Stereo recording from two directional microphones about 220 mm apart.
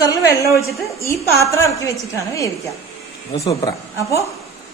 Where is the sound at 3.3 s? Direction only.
25° left (ahead or behind).